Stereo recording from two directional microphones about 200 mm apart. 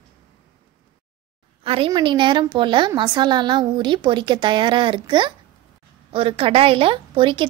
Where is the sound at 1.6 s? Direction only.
25° right (ahead or behind).